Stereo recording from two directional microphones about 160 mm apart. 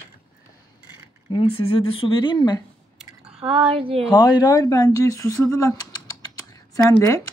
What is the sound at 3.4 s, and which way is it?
Speech, 35° right (ahead or behind).